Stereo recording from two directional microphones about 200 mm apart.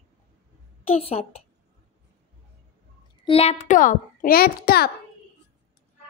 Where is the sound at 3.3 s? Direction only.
30° left (ahead or behind); by 4.8 s 50° left (ahead or behind).